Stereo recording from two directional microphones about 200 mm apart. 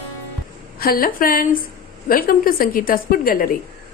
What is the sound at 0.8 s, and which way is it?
A woman's voice, 45° left (ahead or behind).